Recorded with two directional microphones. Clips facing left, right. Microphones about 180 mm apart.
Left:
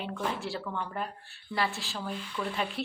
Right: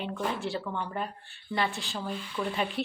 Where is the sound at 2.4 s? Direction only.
10° right (ahead or behind).